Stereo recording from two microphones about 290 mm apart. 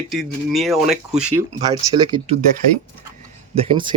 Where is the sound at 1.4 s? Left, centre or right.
Centre.